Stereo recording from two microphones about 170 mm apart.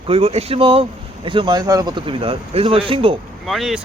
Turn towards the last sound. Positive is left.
turn(degrees=0)  # may be behind; listen again after turning